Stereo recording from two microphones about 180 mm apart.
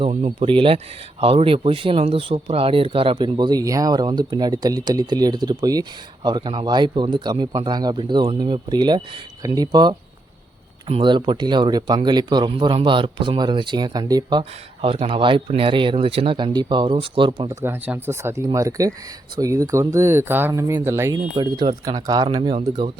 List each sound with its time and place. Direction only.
0.0 s speech: 35° right (ahead or behind)